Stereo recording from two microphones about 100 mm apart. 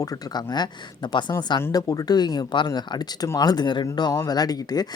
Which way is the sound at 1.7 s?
40° left (ahead or behind).